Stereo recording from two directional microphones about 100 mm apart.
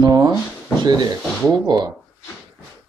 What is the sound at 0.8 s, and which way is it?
Speech, 45° right (ahead or behind).